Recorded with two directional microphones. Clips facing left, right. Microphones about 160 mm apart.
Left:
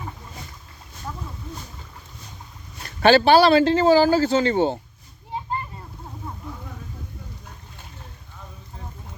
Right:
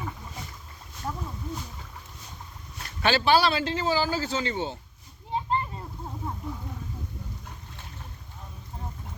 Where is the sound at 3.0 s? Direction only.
65° left (ahead or behind).